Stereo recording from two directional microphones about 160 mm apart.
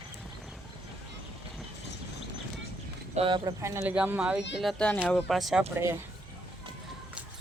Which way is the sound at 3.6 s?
15° right (ahead or behind).